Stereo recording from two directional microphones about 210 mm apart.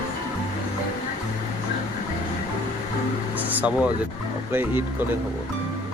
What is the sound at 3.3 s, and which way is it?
Air conditioning, 5° right (ahead or behind).